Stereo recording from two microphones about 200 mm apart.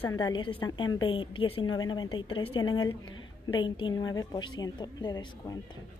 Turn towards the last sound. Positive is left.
turn(degrees=20)  # may be behind; listen again after turning